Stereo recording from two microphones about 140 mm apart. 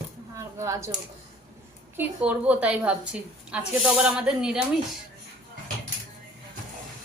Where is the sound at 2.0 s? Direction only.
10° right (ahead or behind).